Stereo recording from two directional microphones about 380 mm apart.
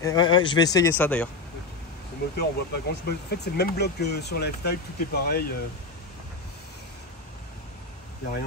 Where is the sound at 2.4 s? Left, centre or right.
Left.